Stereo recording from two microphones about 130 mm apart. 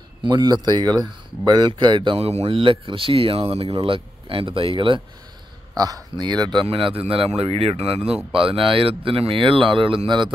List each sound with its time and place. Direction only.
0.2 s speech: 35° right (ahead or behind)
2.1 s speech: 50° right (ahead or behind)
5.8 s speech: 30° right (ahead or behind)